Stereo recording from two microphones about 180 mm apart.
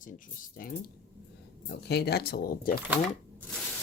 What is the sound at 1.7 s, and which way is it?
Speech, 65° left (ahead or behind).